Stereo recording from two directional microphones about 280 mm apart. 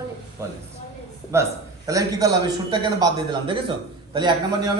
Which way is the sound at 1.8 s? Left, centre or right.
Centre.